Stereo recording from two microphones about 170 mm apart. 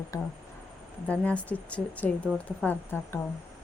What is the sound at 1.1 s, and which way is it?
Speech, 10° left (ahead or behind).